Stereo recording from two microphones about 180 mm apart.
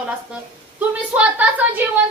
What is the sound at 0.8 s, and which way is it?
Speech, 10° right (ahead or behind).